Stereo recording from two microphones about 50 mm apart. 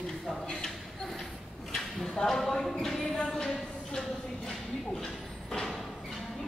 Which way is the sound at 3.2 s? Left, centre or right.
Centre.